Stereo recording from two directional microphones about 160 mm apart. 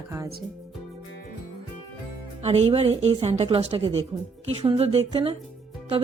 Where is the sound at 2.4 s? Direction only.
40° right (ahead or behind).